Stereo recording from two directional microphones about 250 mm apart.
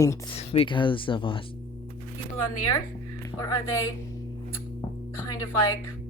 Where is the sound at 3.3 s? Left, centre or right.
Centre.